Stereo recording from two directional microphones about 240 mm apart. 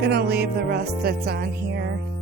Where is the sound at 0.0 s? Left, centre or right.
Right.